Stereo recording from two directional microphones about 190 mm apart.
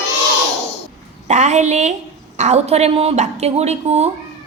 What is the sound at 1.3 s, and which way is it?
A woman's voice, 35° right (ahead or behind).